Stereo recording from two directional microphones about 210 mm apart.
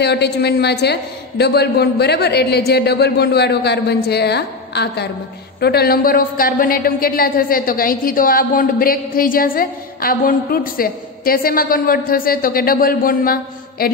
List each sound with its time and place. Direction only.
0.0 s a woman's voice: 50° left (ahead or behind)